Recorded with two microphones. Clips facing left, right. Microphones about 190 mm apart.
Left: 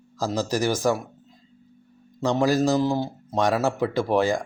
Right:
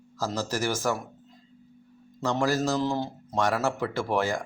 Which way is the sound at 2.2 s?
15° left (ahead or behind).